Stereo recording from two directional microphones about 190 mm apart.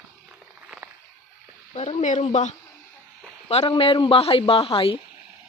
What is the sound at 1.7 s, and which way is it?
A woman's voice, 35° left (ahead or behind).